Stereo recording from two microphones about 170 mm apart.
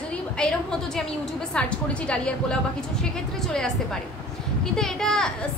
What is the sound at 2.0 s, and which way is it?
Speech, 5° left (ahead or behind).